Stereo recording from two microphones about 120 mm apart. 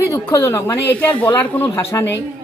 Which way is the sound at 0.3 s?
25° left (ahead or behind).